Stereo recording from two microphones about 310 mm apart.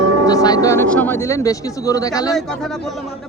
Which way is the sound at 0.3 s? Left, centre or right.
Centre.